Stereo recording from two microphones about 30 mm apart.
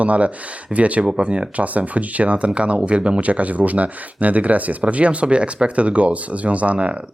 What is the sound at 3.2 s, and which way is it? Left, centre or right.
Speech, right.